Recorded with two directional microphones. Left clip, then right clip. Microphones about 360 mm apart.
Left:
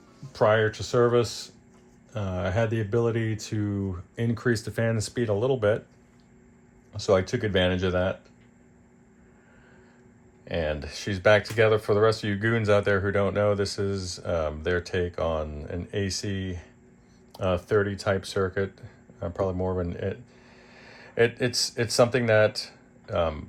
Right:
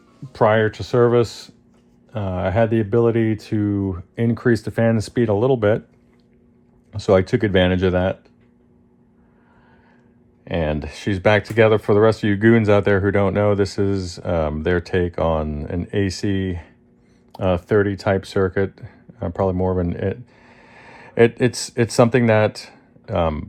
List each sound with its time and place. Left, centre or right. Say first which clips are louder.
0.3 s speech: right 5 dB; centre
6.9 s speech: right 7 dB; right
10.8 s speech: right 7 dB; centre
21.5 s speech: right 5 dB; right
21.9 s speech: right 5 dB; centre